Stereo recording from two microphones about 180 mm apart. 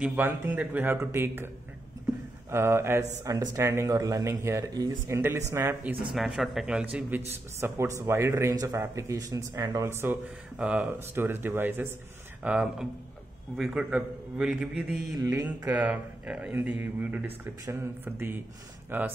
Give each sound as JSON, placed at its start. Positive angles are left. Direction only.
{"t": 0.0, "sound": "speech", "side_deg": -10}
{"t": 2.5, "sound": "speech", "side_deg": -15}
{"t": 6.1, "sound": "a man's voice", "side_deg": 0}
{"t": 15.1, "sound": "speech", "side_deg": -15}